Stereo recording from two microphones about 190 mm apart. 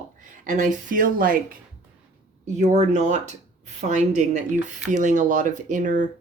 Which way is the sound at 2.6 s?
35° right (ahead or behind).